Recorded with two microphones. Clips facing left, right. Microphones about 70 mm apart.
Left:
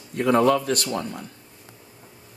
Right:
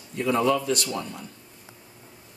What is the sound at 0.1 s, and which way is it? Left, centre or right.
A man's voice, left.